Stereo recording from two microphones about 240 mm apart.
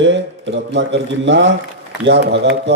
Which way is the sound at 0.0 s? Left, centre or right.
Right.